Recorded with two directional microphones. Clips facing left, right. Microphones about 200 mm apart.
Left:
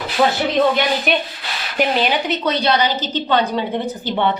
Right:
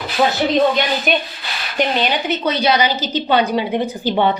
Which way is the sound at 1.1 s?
Centre (ahead or behind).